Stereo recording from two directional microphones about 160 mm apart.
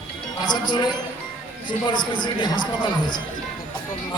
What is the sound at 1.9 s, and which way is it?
Speech, 30° left (ahead or behind).